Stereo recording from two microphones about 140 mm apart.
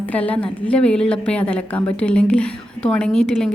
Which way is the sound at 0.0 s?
10° left (ahead or behind).